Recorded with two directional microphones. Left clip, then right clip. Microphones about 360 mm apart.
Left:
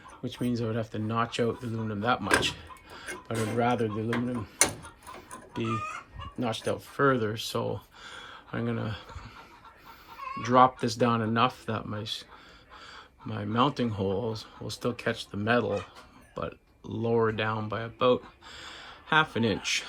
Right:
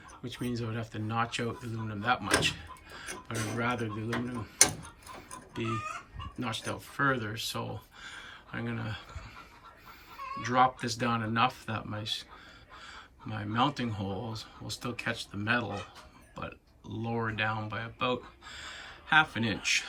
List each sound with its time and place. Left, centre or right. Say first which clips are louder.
0.3 s speech: left 5 dB; centre
5.3 s chicken: left 3 dB; centre
6.4 s speech: left 6 dB; centre
10.3 s speech: left 5 dB; centre